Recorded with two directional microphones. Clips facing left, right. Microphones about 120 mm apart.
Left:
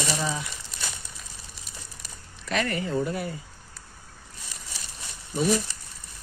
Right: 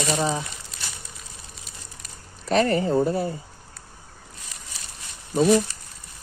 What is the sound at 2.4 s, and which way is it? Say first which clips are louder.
Speech: right 7 dB; 35° right (ahead or behind).